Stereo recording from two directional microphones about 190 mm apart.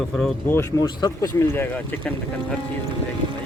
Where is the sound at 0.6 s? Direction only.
20° left (ahead or behind).